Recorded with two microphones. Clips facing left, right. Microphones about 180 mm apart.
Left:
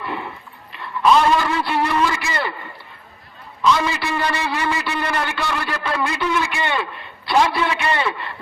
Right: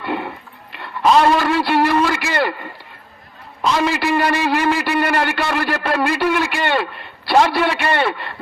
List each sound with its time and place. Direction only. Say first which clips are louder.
0.0 s a sound: right 5 dB; 70° right (ahead or behind)
0.7 s a man's voice: right 1 dB; 55° right (ahead or behind)
3.8 s a man's voice: right 5 dB; 60° right (ahead or behind)